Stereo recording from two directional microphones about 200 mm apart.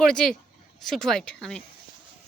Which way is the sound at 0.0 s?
Centre (ahead or behind).